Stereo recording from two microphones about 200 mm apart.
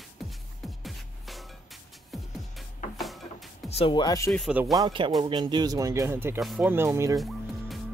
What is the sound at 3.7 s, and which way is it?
Speech, 25° left (ahead or behind).